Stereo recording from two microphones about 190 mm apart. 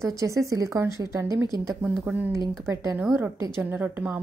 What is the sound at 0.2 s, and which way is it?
A woman's voice, 15° right (ahead or behind).